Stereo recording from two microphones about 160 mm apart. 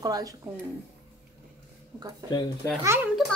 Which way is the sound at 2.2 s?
25° left (ahead or behind).